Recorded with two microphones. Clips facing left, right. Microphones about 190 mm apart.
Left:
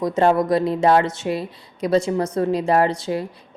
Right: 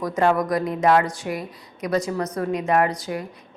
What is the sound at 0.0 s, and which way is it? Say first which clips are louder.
A woman's voice: left 3 dB; 25° left (ahead or behind).